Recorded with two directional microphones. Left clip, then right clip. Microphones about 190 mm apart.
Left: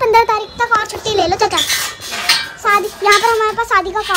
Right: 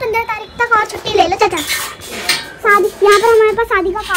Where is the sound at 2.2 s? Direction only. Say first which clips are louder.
Left 2 dB; 80° right.